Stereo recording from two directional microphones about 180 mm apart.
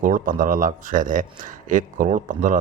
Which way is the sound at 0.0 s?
50° right (ahead or behind).